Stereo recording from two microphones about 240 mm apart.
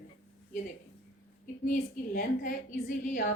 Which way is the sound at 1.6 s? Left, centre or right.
Left.